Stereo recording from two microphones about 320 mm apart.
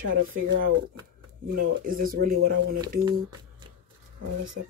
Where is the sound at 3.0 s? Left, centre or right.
Centre.